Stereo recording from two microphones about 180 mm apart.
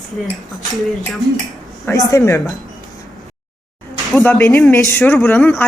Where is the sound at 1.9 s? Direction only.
15° left (ahead or behind).